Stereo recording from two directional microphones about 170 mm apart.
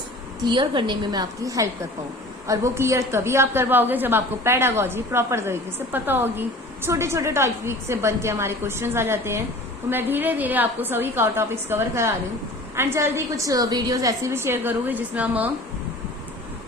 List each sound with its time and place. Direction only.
0.4 s a woman's voice: 25° right (ahead or behind); by 15.4 s 10° right (ahead or behind)